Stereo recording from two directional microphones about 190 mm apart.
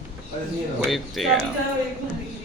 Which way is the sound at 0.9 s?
Centre (ahead or behind).